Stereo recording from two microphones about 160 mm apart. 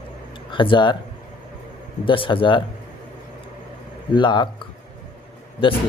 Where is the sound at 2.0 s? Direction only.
30° left (ahead or behind).